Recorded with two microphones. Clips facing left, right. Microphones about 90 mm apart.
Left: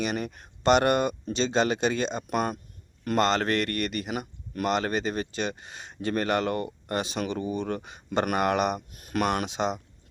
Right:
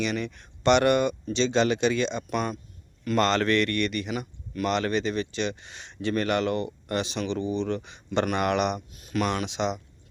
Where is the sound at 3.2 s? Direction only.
25° left (ahead or behind); by 8.4 s 45° left (ahead or behind).